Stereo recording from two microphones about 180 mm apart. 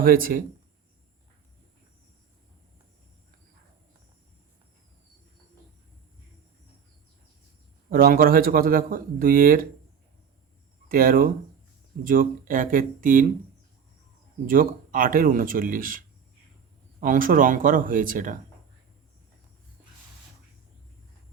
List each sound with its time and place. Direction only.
0.0 s speech: 50° right (ahead or behind)
7.9 s speech: 55° right (ahead or behind)
10.8 s speech: 50° right (ahead or behind)
14.4 s speech: 50° right (ahead or behind)